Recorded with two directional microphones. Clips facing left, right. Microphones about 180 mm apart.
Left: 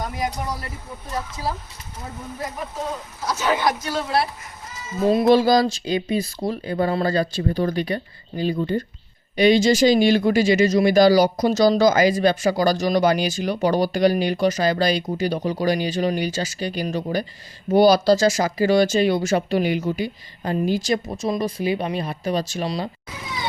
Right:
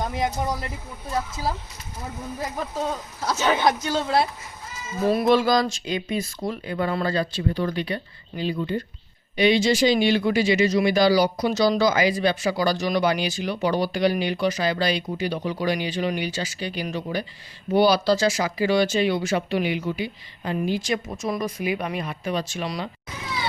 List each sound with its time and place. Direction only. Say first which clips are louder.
0.1 s speech: right 1 dB; 25° right (ahead or behind)
3.2 s speech: even; 25° right (ahead or behind)
5.0 s speech: left 3 dB; 25° left (ahead or behind)